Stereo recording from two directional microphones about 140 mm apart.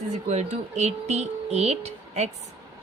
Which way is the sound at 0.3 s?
55° right (ahead or behind).